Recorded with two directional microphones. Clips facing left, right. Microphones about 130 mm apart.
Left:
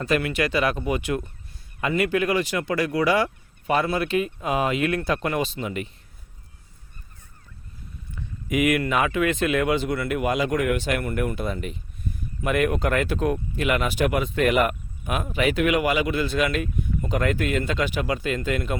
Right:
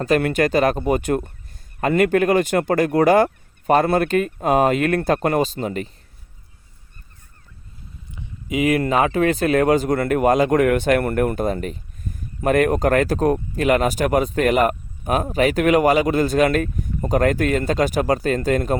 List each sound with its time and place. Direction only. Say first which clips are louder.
0.0 s speech: right 5 dB; 45° right (ahead or behind)
8.1 s speech: right 1 dB; 20° right (ahead or behind); by 18.8 s 40° right (ahead or behind)